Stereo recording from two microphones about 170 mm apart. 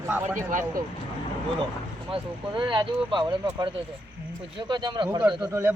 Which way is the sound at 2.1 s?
30° right (ahead or behind).